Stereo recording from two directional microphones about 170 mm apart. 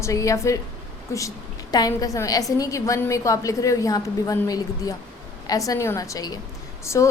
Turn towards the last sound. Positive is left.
turn(degrees=15)  # may be behind; listen again after turning